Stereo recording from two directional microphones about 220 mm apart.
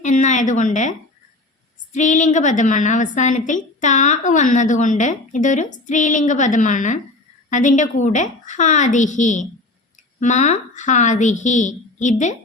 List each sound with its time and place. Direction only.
0.0 s a woman's voice: 35° left (ahead or behind)